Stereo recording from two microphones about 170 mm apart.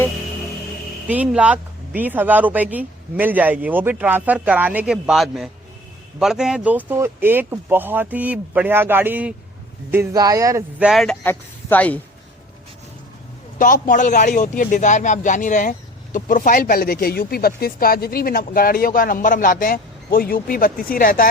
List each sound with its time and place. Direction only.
1.0 s a man's voice: 10° right (ahead or behind)
10.8 s speech: centre (ahead or behind)
13.6 s speech: 55° left (ahead or behind)